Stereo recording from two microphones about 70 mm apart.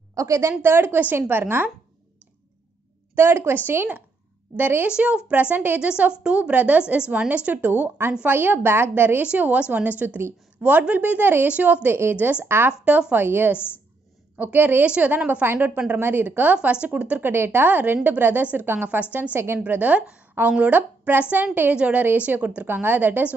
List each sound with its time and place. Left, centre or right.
0.1 s a woman's voice: right
0.5 s a woman's voice: right
3.2 s a woman's voice: right
4.8 s a woman's voice: centre; by 9.2 s right
9.2 s a woman's voice: centre
12.8 s a woman's voice: centre
17.2 s a woman's voice: right
19.6 s a woman's voice: right